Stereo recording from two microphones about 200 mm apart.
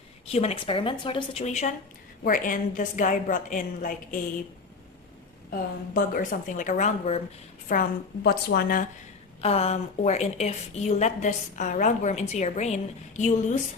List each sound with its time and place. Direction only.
0.3 s a woman's voice: 30° left (ahead or behind)
5.5 s a woman's voice: 45° left (ahead or behind)
7.7 s a woman's voice: 45° left (ahead or behind)
9.4 s a woman's voice: 30° left (ahead or behind)